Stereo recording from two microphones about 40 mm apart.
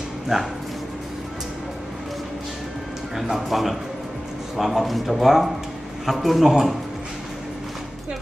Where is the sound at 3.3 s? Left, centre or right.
Centre.